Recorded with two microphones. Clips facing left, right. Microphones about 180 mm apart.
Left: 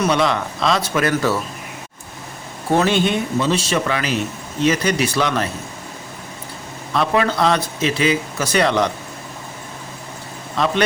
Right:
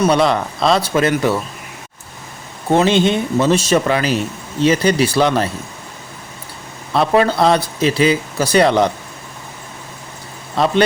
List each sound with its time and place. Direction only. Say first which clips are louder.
0.0 s speech: right 4 dB; 35° right (ahead or behind)
1.1 s speech: right 2 dB; 15° right (ahead or behind)
2.6 s speech: right 3 dB; 20° right (ahead or behind)
3.4 s speech: right 5 dB; 45° right (ahead or behind)
6.9 s speech: right 4 dB; 35° right (ahead or behind)